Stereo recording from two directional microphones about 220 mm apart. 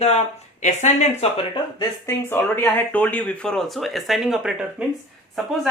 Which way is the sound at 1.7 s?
10° left (ahead or behind).